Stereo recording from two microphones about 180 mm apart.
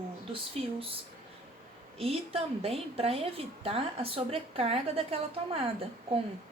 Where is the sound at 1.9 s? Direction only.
35° right (ahead or behind).